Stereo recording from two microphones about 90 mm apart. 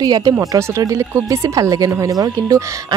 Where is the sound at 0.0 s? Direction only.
45° right (ahead or behind).